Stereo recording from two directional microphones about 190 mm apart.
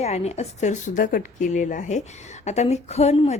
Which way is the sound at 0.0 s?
35° left (ahead or behind).